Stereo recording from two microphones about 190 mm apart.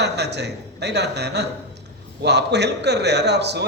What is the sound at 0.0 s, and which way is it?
A man's voice, 60° right (ahead or behind).